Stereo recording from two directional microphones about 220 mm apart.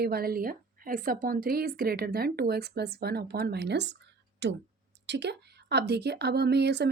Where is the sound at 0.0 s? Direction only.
45° right (ahead or behind).